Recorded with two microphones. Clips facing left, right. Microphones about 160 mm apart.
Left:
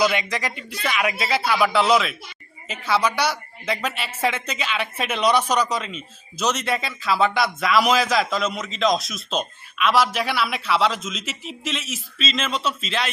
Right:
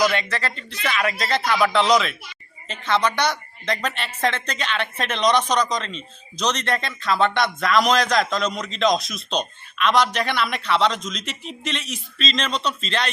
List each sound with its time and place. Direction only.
0.0 s speech: 10° left (ahead or behind)